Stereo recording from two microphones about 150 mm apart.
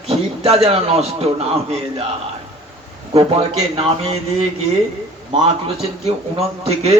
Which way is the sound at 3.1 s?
40° right (ahead or behind).